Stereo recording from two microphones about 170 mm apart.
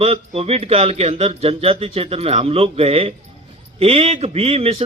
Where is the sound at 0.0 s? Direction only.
35° right (ahead or behind).